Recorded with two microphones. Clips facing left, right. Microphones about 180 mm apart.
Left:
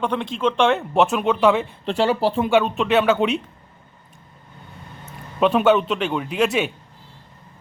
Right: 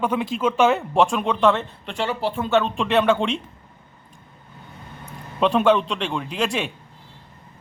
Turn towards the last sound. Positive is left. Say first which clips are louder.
# left 4 dB
turn(degrees=5)  # may be behind; listen again after turning